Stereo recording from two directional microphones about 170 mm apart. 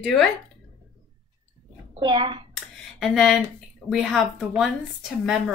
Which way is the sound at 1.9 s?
25° right (ahead or behind).